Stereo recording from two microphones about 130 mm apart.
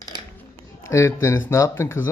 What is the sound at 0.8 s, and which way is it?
Speech, 20° left (ahead or behind).